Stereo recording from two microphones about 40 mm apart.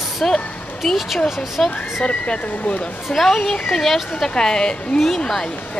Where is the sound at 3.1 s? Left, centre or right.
Centre.